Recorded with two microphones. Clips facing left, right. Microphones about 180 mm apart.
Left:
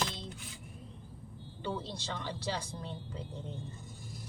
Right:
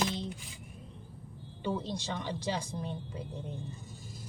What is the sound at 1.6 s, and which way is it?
A woman's voice, 15° right (ahead or behind).